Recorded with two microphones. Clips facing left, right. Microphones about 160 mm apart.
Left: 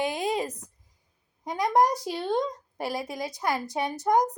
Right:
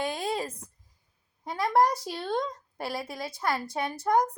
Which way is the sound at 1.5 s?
20° left (ahead or behind).